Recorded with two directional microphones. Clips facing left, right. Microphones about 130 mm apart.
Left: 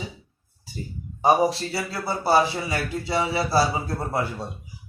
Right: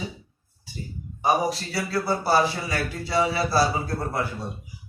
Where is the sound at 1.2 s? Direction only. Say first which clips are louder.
Left 4 dB; 25° left (ahead or behind).